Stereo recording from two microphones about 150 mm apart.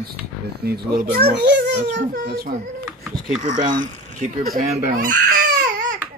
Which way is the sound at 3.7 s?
60° right (ahead or behind).